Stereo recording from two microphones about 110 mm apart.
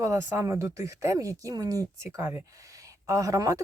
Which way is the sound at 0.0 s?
25° right (ahead or behind).